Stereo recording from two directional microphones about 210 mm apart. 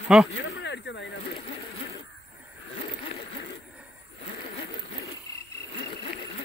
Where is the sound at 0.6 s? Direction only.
55° left (ahead or behind).